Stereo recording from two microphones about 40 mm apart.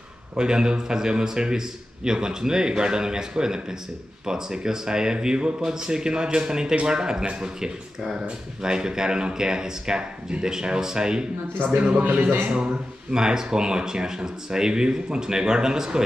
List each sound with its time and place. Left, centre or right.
0.4 s a man's voice: right
12.0 s speech: right
12.4 s speech: right